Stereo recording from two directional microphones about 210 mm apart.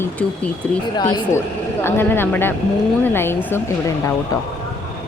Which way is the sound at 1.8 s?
10° left (ahead or behind).